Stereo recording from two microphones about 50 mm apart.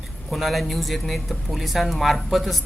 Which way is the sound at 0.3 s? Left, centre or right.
Centre.